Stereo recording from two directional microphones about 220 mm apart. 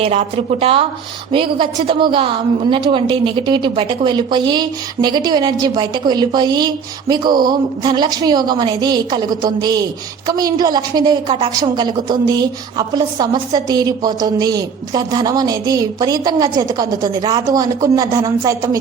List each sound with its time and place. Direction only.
0.0 s a woman's voice: 30° right (ahead or behind)